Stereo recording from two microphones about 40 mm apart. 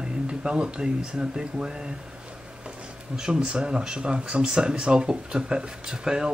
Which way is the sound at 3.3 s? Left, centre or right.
Right.